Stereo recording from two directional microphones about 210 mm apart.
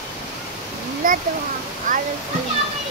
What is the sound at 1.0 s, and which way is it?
Speech, 40° right (ahead or behind).